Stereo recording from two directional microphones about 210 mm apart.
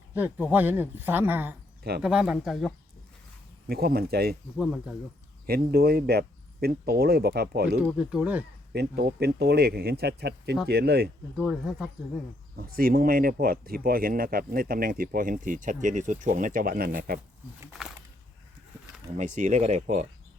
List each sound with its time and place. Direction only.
0.1 s speech: 10° right (ahead or behind)
3.7 s speech: 45° right (ahead or behind)
4.5 s speech: centre (ahead or behind)
5.5 s speech: 45° right (ahead or behind)
7.8 s speech: 5° right (ahead or behind)
8.7 s speech: 50° right (ahead or behind)
11.3 s speech: centre (ahead or behind)
12.5 s speech: 45° right (ahead or behind)
17.6 s speech: 5° right (ahead or behind)
19.1 s speech: 35° right (ahead or behind)